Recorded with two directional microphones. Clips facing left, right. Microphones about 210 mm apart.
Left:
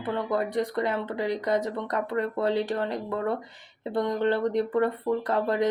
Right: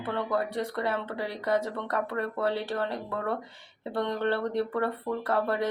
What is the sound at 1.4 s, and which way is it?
Speech, 15° left (ahead or behind).